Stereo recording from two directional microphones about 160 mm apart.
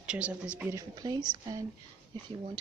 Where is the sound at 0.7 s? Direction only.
25° right (ahead or behind).